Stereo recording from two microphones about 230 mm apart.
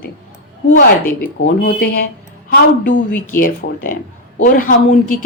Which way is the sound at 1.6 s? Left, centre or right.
Left.